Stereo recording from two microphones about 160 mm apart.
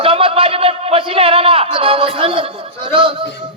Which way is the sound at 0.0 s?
35° right (ahead or behind).